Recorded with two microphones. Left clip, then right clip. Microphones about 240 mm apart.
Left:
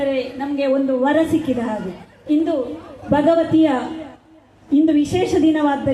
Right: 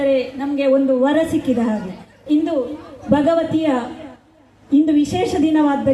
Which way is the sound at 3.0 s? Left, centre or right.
Right.